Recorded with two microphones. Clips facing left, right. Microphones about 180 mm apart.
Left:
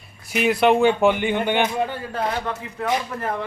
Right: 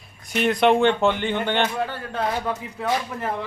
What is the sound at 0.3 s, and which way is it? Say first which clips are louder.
Speech: left 1 dB; 5° left (ahead or behind).